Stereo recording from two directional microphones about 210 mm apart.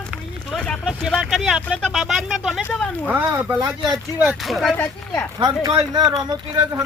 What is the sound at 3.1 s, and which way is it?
Speech, 10° right (ahead or behind).